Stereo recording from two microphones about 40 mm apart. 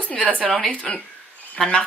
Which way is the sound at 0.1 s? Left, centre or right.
Left.